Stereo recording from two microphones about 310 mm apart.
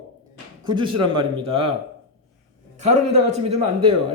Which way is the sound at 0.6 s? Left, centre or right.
Centre.